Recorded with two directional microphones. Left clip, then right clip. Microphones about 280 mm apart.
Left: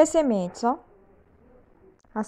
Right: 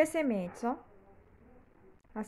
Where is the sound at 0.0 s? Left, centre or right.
Left.